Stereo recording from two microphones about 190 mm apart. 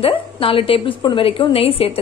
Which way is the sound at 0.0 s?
30° left (ahead or behind).